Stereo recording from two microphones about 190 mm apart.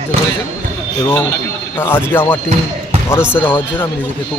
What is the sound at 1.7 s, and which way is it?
Speech, 10° left (ahead or behind).